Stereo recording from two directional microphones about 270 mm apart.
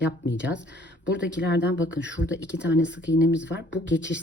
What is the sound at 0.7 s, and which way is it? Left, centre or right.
Speech, left.